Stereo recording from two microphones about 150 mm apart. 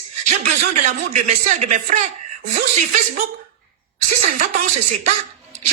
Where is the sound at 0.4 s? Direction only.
55° right (ahead or behind).